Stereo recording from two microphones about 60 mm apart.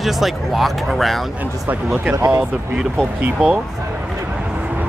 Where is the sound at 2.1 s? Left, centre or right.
Right.